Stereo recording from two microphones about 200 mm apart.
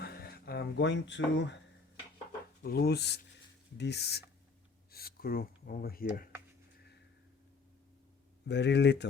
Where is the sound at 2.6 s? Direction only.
50° left (ahead or behind).